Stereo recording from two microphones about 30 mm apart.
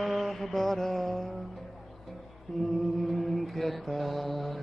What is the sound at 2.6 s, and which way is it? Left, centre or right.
Mantra, centre.